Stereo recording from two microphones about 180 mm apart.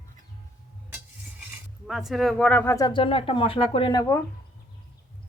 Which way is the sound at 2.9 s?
30° left (ahead or behind).